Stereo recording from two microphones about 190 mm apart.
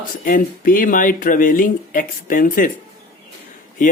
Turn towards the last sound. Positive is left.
turn(degrees=45)  # may be behind; listen again after turning